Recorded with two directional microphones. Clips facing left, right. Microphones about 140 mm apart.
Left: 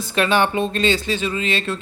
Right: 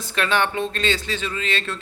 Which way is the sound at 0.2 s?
10° left (ahead or behind).